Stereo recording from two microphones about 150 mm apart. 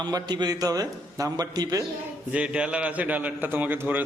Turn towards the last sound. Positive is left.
turn(degrees=-15)  # may be behind; listen again after turning